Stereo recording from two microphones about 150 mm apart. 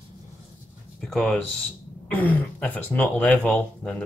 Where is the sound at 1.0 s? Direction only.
5° left (ahead or behind).